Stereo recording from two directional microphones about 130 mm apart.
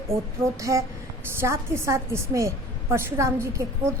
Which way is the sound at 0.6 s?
25° right (ahead or behind).